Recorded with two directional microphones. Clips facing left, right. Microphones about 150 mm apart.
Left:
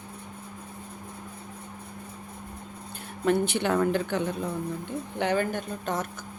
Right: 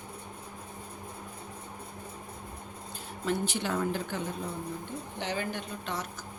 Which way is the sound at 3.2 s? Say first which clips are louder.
Left 7 dB; 60° left (ahead or behind).